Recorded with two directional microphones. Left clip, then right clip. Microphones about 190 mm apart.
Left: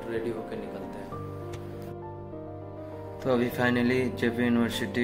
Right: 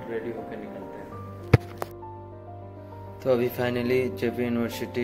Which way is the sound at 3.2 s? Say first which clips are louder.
Right 2 dB; 35° right (ahead or behind).